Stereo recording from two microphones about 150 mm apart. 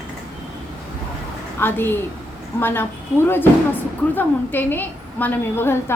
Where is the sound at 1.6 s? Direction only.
15° left (ahead or behind).